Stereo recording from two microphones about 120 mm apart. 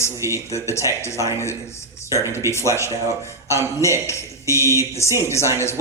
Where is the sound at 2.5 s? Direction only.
25° left (ahead or behind).